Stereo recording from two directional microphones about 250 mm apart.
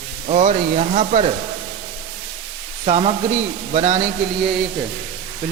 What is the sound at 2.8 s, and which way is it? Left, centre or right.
Speech, right.